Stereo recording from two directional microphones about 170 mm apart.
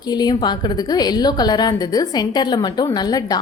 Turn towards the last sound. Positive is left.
turn(degrees=25)  # may be behind; listen again after turning